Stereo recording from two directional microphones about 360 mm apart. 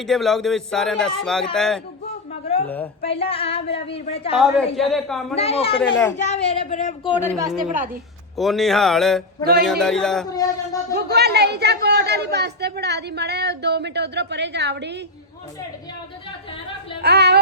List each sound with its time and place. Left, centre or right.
0.0 s speech: centre
3.0 s a man's voice: centre
4.4 s speech: centre
5.4 s a man's voice: centre
5.8 s speech: centre
6.1 s a man's voice: centre
7.2 s speech: centre
10.9 s speech: right
17.0 s speech: right